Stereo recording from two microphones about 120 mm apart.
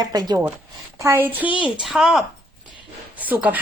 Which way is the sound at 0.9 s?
20° right (ahead or behind).